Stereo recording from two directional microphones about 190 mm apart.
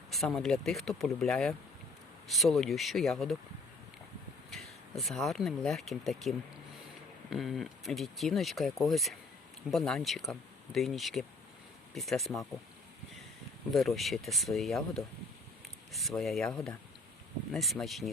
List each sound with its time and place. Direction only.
0.1 s speech: centre (ahead or behind)
4.5 s speech: centre (ahead or behind)
13.7 s speech: centre (ahead or behind)